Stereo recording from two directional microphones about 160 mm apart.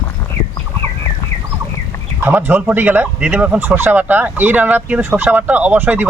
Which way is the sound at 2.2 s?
15° right (ahead or behind).